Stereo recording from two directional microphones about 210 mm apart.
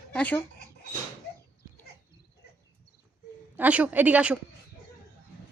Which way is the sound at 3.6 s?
5° right (ahead or behind).